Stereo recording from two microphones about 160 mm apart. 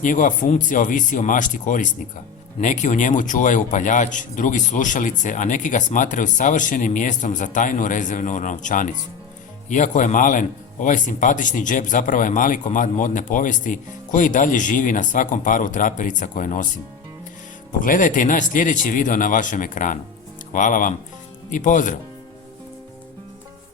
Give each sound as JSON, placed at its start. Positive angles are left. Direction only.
{"t": 0.0, "sound": "a man's voice", "side_deg": 55}
{"t": 17.7, "sound": "a man's voice", "side_deg": 55}